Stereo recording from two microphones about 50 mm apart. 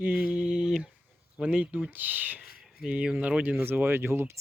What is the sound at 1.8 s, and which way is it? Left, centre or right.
Speech, right.